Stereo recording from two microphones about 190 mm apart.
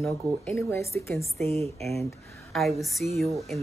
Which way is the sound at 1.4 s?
35° right (ahead or behind).